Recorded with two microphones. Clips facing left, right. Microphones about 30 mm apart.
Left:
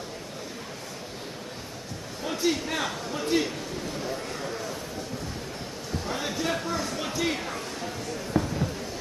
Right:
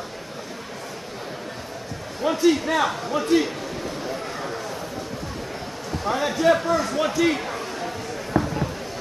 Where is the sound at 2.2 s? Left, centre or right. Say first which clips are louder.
Right 8 dB; right.